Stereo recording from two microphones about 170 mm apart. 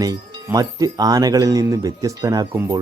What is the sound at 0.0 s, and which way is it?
Speech, 20° right (ahead or behind).